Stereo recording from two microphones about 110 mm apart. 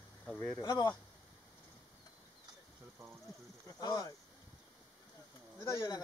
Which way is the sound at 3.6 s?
35° left (ahead or behind).